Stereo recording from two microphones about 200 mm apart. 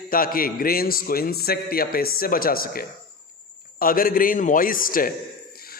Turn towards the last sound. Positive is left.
turn(degrees=45)  # may be behind; listen again after turning